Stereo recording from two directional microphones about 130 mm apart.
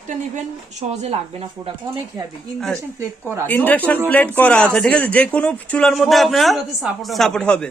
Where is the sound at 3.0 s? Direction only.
20° right (ahead or behind).